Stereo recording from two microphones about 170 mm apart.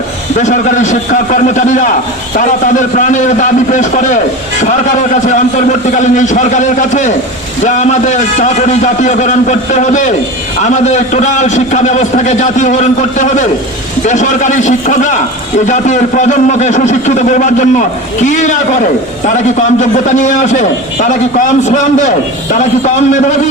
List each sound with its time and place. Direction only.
0.3 s a man's voice: 50° left (ahead or behind)
2.9 s a man's voice: 45° left (ahead or behind)
5.2 s a man's voice: 45° left (ahead or behind)